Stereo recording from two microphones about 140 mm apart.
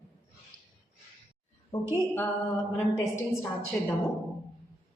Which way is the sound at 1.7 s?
25° left (ahead or behind).